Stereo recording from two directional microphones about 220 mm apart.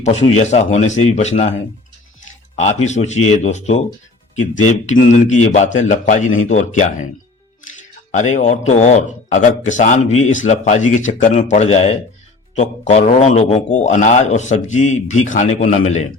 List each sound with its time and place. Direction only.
0.0 s a man's voice: 30° left (ahead or behind)
2.6 s a man's voice: 30° left (ahead or behind)
8.1 s a man's voice: 35° left (ahead or behind)